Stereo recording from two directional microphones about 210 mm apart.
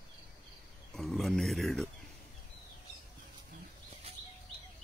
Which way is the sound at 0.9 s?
Centre (ahead or behind).